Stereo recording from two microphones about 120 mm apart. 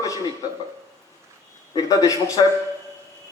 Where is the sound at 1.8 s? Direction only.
30° left (ahead or behind).